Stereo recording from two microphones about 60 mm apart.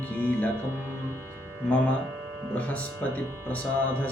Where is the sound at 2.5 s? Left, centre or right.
Left.